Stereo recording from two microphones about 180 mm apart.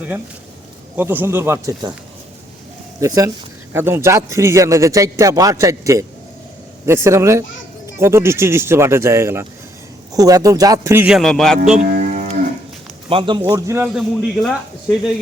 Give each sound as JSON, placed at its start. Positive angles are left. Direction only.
{"t": 0.9, "sound": "a man's voice", "side_deg": -10}
{"t": 3.0, "sound": "a man's voice", "side_deg": -20}
{"t": 11.9, "sound": "livestock", "side_deg": -45}
{"t": 13.1, "sound": "speech", "side_deg": -30}
{"t": 13.4, "sound": "a man's voice", "side_deg": -20}
{"t": 13.8, "sound": "a man's voice", "side_deg": -5}